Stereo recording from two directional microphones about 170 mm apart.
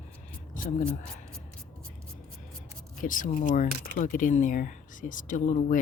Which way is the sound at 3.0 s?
50° left (ahead or behind).